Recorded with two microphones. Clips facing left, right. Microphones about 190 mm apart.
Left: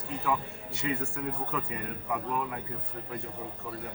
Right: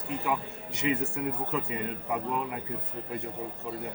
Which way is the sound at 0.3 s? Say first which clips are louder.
Left 2 dB; 20° right (ahead or behind).